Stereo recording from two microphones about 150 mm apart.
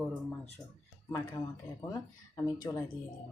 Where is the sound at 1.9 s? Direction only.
25° left (ahead or behind).